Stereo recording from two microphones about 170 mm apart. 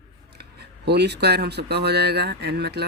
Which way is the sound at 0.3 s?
75° right (ahead or behind).